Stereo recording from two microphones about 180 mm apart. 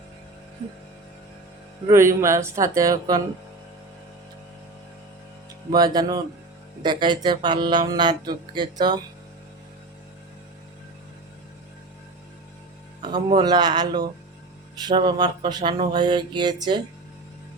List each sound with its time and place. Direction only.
1.9 s speech: 15° right (ahead or behind)
5.7 s speech: 20° right (ahead or behind)
13.0 s speech: 25° right (ahead or behind)